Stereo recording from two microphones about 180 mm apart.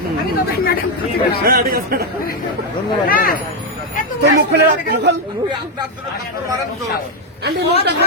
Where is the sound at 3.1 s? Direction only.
55° left (ahead or behind).